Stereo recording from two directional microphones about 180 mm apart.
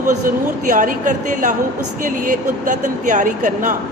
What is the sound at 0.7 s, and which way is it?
A woman's voice, 45° right (ahead or behind).